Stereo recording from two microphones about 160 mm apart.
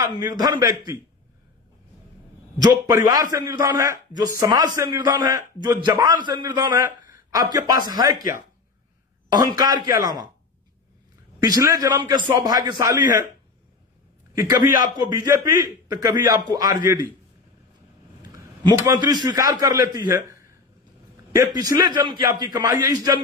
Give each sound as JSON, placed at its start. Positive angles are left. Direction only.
{"t": 0.0, "sound": "a man's voice", "side_deg": -25}
{"t": 3.3, "sound": "a man's voice", "side_deg": -20}
{"t": 9.3, "sound": "a man's voice", "side_deg": -25}
{"t": 11.4, "sound": "a man's voice", "side_deg": -25}
{"t": 14.3, "sound": "a man's voice", "side_deg": -20}
{"t": 18.2, "sound": "a man's voice", "side_deg": -20}
{"t": 20.2, "sound": "a sound", "side_deg": -20}
{"t": 21.4, "sound": "a man's voice", "side_deg": -25}